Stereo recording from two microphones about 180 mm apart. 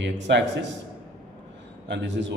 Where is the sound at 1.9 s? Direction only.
75° right (ahead or behind).